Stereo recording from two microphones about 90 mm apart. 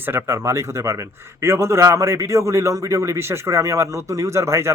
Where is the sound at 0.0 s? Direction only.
25° right (ahead or behind).